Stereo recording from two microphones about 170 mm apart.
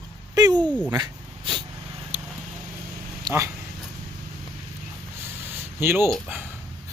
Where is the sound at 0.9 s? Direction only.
25° right (ahead or behind).